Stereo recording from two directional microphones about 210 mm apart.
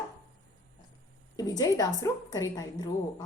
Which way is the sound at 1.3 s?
15° left (ahead or behind).